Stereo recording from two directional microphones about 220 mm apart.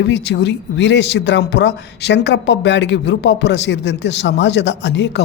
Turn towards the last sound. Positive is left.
turn(degrees=50)  # may be behind; listen again after turning